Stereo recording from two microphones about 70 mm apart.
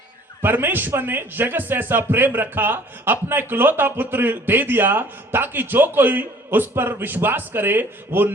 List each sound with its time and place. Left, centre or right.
0.4 s a man's voice: right